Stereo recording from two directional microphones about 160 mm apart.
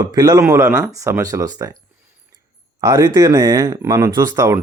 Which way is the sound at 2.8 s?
25° right (ahead or behind).